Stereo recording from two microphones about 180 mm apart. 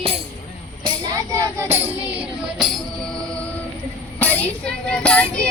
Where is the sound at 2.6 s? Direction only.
Centre (ahead or behind).